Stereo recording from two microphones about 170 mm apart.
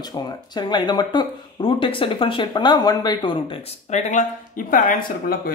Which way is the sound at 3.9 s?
45° left (ahead or behind).